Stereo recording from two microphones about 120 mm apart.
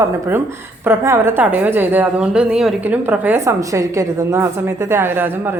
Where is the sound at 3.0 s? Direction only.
15° right (ahead or behind).